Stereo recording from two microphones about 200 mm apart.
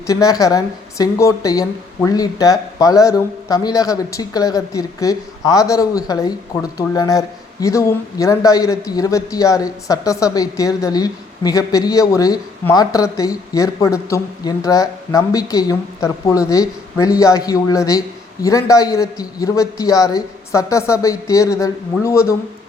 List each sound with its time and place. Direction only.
0.1 s speech: 15° left (ahead or behind)